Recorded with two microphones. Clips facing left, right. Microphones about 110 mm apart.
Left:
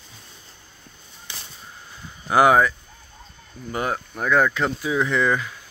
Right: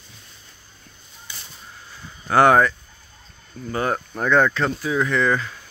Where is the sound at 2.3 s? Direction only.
10° left (ahead or behind).